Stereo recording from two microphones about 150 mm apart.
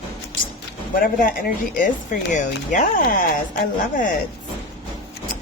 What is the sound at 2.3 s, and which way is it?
Speech, 55° left (ahead or behind).